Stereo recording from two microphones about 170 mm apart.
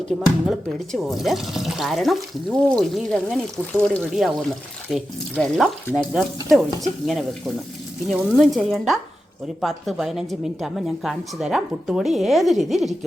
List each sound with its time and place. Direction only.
0.9 s a woman's voice: centre (ahead or behind)